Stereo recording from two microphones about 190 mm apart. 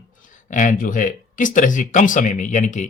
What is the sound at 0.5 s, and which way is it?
Speech, 45° left (ahead or behind).